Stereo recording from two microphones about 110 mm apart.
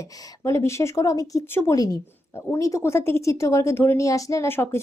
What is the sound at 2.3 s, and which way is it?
Speech, 25° left (ahead or behind).